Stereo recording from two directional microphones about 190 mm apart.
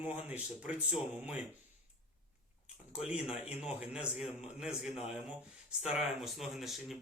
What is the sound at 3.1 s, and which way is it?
A man's voice, 5° right (ahead or behind).